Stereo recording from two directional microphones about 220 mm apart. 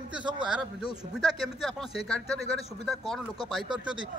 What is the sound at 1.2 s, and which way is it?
Speech, centre (ahead or behind).